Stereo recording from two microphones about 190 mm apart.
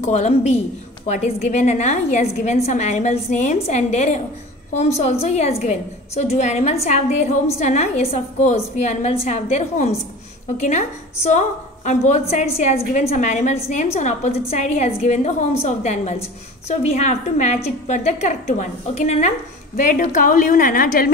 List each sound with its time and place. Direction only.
0.0 s a woman's voice: 35° left (ahead or behind)